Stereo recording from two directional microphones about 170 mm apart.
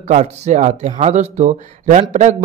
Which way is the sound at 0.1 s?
45° right (ahead or behind).